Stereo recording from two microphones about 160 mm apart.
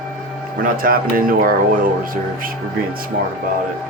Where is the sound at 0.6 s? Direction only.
65° right (ahead or behind).